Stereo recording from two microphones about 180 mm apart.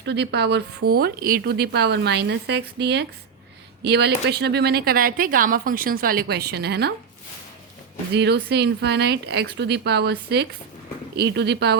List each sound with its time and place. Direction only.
0.0 s speech: 70° right (ahead or behind)
8.1 s speech: 65° right (ahead or behind)